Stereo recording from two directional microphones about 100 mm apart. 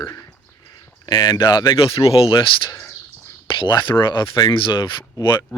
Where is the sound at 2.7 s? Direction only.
35° left (ahead or behind).